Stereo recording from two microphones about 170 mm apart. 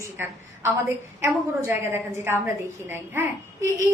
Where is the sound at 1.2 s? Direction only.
15° right (ahead or behind).